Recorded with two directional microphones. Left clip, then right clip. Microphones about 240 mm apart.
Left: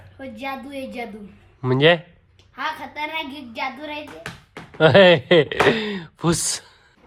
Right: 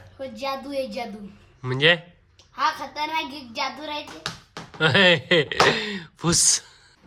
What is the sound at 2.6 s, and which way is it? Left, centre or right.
Speech, centre.